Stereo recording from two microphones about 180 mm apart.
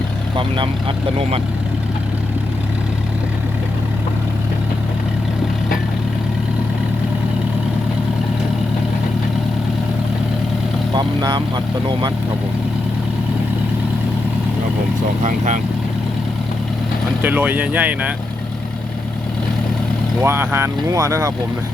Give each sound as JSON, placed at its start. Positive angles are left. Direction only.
{"t": 0.3, "sound": "speech", "side_deg": -25}
{"t": 10.9, "sound": "speech", "side_deg": -25}
{"t": 15.2, "sound": "speech", "side_deg": -40}
{"t": 17.2, "sound": "speech", "side_deg": -10}
{"t": 20.2, "sound": "speech", "side_deg": -10}